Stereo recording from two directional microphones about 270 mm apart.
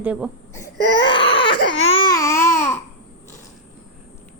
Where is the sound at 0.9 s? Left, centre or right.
Centre.